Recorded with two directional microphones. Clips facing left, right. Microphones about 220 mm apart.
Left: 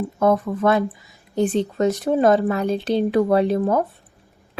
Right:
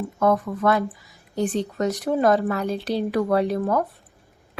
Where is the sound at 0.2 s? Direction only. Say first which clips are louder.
Left 2 dB; 25° left (ahead or behind).